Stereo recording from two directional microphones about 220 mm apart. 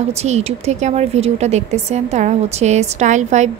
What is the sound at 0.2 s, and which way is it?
Speech, 30° right (ahead or behind).